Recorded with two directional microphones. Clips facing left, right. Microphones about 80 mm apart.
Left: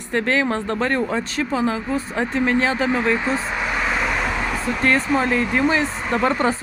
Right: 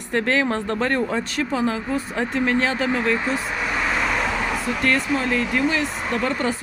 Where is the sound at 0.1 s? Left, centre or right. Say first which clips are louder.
Left 1 dB; left.